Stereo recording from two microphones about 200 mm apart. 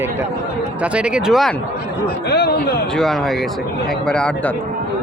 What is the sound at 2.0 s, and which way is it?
Speech, 55° left (ahead or behind).